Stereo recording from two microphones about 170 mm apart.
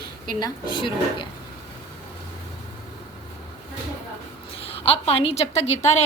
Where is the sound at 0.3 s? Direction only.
25° left (ahead or behind).